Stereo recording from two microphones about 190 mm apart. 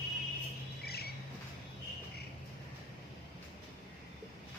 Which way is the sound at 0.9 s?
55° left (ahead or behind).